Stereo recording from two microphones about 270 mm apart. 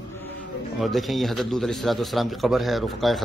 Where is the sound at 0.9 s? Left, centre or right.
Centre.